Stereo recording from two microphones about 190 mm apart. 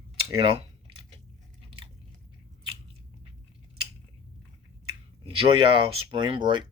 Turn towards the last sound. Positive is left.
turn(degrees=-25)  # may be behind; listen again after turning